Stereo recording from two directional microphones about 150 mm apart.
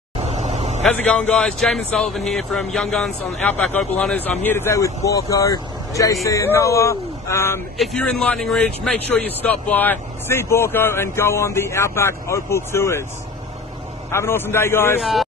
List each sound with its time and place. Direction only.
0.3 s vehicle: 50° right (ahead or behind)
0.8 s a man's voice: 5° left (ahead or behind)
7.7 s speech: centre (ahead or behind); by 13.0 s 20° left (ahead or behind)
14.1 s speech: 15° left (ahead or behind)
15.0 s a man's voice: centre (ahead or behind)